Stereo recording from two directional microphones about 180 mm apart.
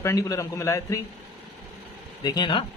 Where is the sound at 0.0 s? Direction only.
20° left (ahead or behind).